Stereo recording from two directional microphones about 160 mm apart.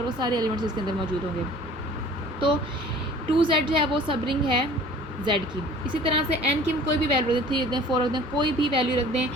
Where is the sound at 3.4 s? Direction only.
30° right (ahead or behind).